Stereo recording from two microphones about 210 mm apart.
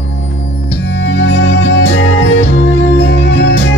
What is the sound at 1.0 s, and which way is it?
Music, 55° left (ahead or behind).